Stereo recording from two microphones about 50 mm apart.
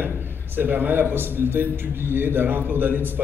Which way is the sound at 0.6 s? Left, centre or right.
Right.